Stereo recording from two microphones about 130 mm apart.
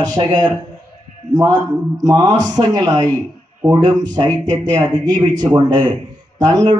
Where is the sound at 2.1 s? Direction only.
30° right (ahead or behind).